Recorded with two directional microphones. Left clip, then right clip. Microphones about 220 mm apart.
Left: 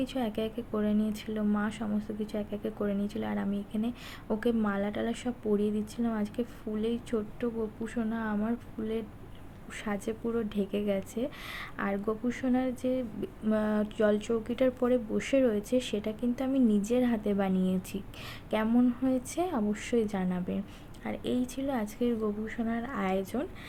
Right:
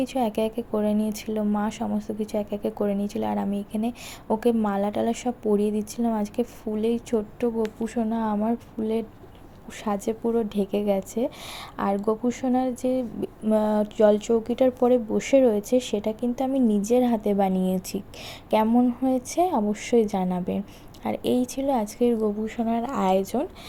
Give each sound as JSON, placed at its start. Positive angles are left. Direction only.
{"t": 0.0, "sound": "a woman's voice", "side_deg": -15}